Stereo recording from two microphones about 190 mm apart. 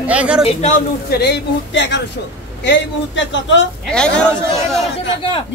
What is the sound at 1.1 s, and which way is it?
A man's voice, 60° left (ahead or behind).